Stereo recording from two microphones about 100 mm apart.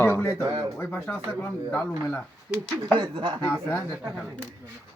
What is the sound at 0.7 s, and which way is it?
Speech, 20° left (ahead or behind).